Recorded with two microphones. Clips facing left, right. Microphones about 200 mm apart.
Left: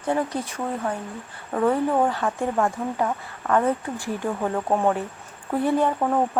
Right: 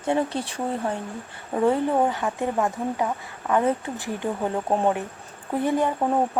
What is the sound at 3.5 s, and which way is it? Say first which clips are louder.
Speech: left 1 dB; 20° right (ahead or behind).